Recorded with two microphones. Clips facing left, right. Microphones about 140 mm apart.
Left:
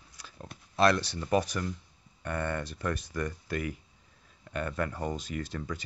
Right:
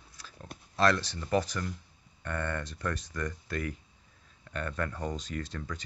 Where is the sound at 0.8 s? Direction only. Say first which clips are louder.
Left 2 dB; 15° left (ahead or behind).